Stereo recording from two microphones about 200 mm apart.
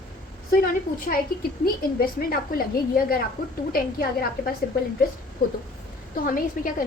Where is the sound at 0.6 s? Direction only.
45° left (ahead or behind).